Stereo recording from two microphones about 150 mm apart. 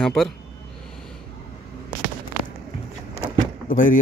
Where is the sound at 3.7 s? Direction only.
60° left (ahead or behind).